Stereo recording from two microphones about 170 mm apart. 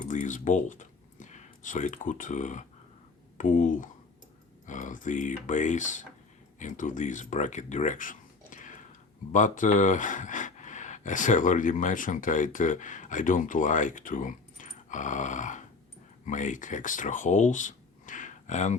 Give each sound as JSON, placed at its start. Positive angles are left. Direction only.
{"t": 0.0, "sound": "speech", "side_deg": 50}